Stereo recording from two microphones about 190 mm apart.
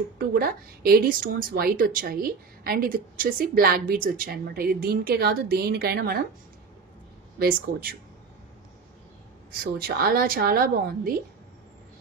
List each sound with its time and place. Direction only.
0.2 s a woman's voice: 50° right (ahead or behind)
7.3 s a woman's voice: 50° right (ahead or behind)
9.6 s a woman's voice: 55° right (ahead or behind)